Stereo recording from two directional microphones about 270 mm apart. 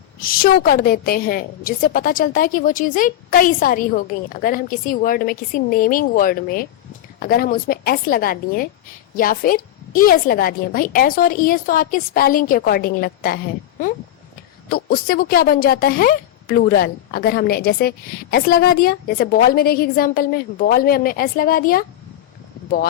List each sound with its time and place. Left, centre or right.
0.2 s a woman's voice: left